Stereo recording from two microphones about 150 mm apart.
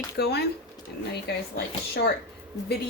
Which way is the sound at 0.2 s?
90° left.